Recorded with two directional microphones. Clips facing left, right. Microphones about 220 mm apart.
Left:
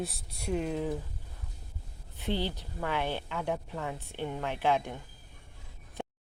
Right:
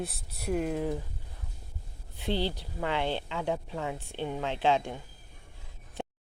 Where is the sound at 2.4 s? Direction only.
15° right (ahead or behind).